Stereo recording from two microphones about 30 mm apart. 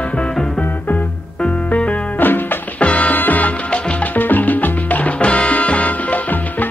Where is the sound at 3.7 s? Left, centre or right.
Left.